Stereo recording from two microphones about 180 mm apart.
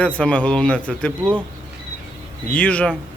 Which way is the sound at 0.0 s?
5° left (ahead or behind).